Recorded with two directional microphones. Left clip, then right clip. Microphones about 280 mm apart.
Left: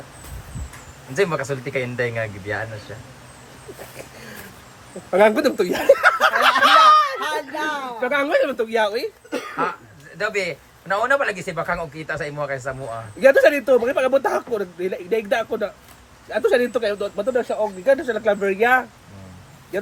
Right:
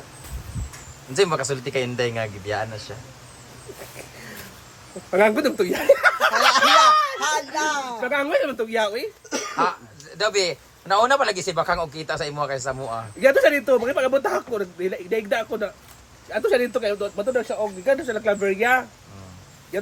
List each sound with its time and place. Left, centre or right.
1.1 s a man's voice: centre
3.9 s a sound: centre
5.1 s speech: centre
7.2 s a sound: right
8.0 s a man's voice: centre
10.2 s a man's voice: centre